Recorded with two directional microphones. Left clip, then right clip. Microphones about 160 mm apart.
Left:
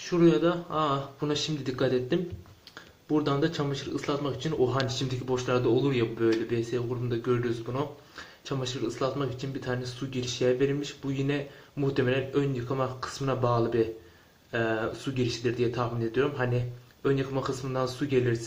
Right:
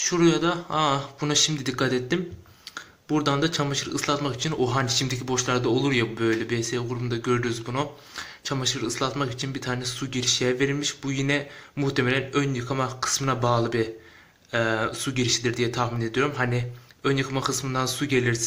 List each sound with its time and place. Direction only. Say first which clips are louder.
0.1 s speech: even; 15° right (ahead or behind)